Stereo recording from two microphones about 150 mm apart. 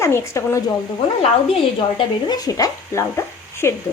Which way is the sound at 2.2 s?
25° left (ahead or behind).